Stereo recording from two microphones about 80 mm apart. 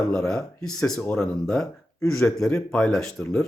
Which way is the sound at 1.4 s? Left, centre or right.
Centre.